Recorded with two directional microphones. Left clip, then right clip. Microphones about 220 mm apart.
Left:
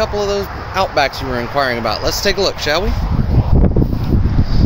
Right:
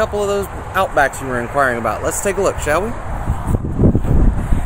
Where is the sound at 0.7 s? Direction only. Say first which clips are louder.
Even; 5° left (ahead or behind).